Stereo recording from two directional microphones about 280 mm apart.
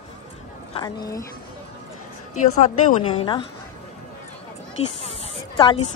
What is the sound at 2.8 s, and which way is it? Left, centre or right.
Speech, centre.